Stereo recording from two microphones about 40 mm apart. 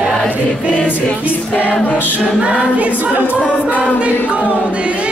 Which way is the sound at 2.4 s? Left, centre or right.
Right.